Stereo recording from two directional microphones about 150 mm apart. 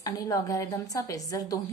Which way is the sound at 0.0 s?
25° left (ahead or behind).